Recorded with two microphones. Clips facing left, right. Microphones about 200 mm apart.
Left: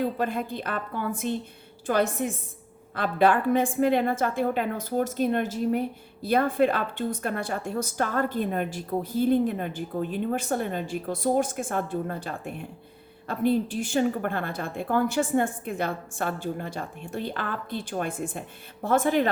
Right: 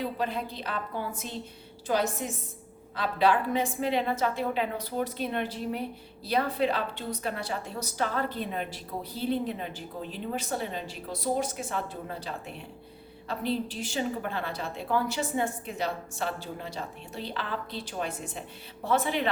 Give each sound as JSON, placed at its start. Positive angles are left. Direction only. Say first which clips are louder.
{"t": 0.0, "sound": "a woman's voice", "louder": "left 4 dB", "side_deg": 50}